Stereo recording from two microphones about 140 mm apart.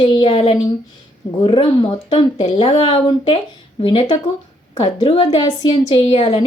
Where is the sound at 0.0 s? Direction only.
40° left (ahead or behind).